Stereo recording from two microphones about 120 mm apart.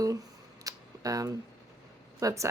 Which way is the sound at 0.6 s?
30° right (ahead or behind).